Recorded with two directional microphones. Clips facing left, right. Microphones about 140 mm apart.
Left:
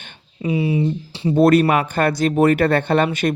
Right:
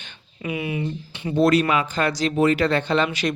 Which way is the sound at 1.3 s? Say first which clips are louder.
Left 4 dB; 55° left (ahead or behind).